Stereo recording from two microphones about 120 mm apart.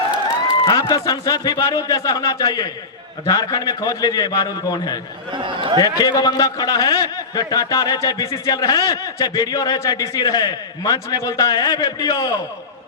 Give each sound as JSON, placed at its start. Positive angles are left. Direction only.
{"t": 0.6, "sound": "a man's voice", "side_deg": 35}
{"t": 5.3, "sound": "a man's voice", "side_deg": -45}
{"t": 5.8, "sound": "a man's voice", "side_deg": 30}